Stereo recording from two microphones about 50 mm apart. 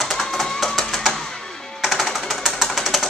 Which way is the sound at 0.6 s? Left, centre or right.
Centre.